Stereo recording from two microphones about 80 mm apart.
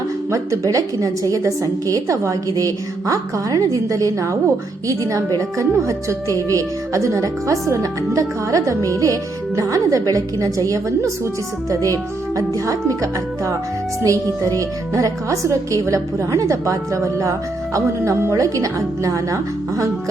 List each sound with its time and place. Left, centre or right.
0.3 s a woman's voice: right
12.4 s a woman's voice: right